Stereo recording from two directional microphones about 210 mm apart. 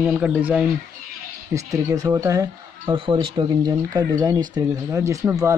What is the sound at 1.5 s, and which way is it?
Speech, 15° right (ahead or behind).